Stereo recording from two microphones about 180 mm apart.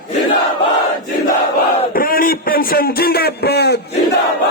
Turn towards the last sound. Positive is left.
turn(degrees=65)  # may be behind; listen again after turning